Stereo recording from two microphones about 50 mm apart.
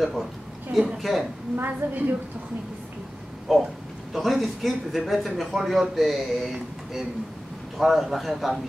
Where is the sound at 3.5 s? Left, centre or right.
Centre.